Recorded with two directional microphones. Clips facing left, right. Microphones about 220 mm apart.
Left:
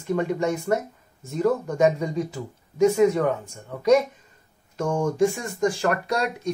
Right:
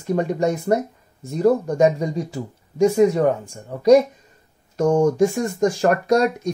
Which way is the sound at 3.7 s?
35° right (ahead or behind).